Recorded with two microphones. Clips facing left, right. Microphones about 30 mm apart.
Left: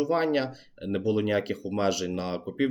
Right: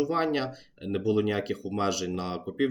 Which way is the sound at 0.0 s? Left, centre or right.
Centre.